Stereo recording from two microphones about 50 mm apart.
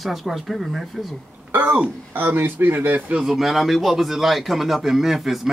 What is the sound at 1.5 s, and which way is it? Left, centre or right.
A man's voice, right.